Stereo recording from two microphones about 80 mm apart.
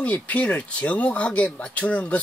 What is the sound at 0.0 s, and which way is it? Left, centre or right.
Speech, centre.